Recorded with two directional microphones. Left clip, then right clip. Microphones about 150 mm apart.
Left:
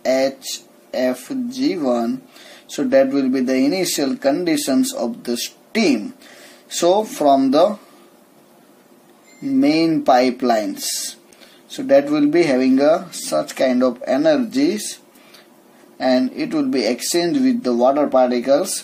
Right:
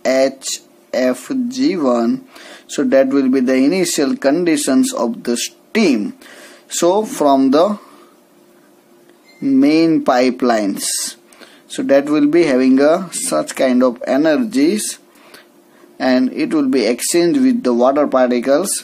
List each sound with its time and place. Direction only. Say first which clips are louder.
0.0 s a sound: right 3 dB; 40° right (ahead or behind)
0.9 s speech: right 4 dB; 45° right (ahead or behind)
9.5 s speech: right 4 dB; 45° right (ahead or behind)
16.0 s speech: right 2 dB; 35° right (ahead or behind)